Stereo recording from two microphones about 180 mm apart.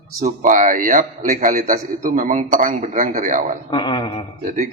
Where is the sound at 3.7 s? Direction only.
25° left (ahead or behind).